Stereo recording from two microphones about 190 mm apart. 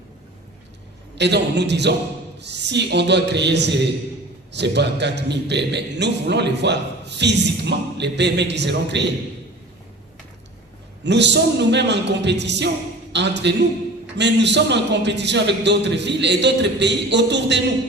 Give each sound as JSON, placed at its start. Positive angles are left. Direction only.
{"t": 1.1, "sound": "a man's voice", "side_deg": -65}
{"t": 11.0, "sound": "a man's voice", "side_deg": -65}